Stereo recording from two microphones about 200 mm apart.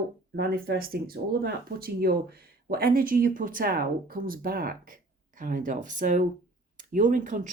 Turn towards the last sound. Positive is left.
turn(degrees=-40)  # may be behind; listen again after turning